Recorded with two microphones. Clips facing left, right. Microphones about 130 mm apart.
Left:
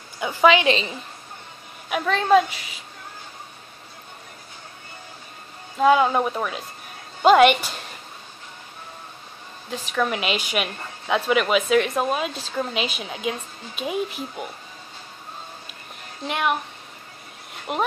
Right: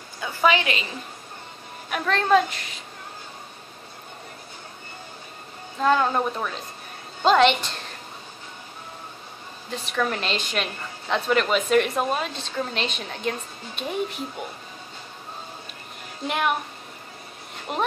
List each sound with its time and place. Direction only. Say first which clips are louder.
0.2 s speech: left 4 dB; 15° left (ahead or behind)
1.9 s a woman's voice: left 2 dB; 5° left (ahead or behind)
5.8 s speech: left 4 dB; 10° left (ahead or behind)
9.7 s a woman's voice: left 2 dB; 5° left (ahead or behind)
16.3 s a woman's voice: left 1 dB; centre (ahead or behind)
17.7 s a woman's voice: left 2 dB; 5° left (ahead or behind)